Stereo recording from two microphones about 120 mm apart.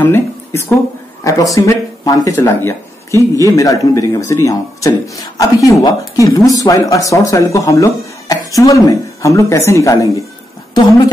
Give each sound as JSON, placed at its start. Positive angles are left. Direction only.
{"t": 0.0, "sound": "speech", "side_deg": 20}